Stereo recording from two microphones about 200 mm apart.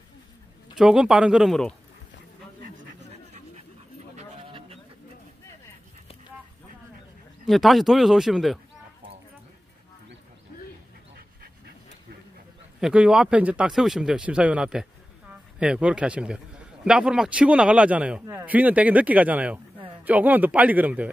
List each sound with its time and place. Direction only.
0.7 s a man's voice: 5° right (ahead or behind)
4.1 s dog: 30° right (ahead or behind)
7.4 s a man's voice: centre (ahead or behind)
12.8 s a man's voice: 5° right (ahead or behind)